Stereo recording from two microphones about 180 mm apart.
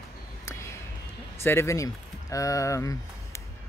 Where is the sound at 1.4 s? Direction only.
15° left (ahead or behind).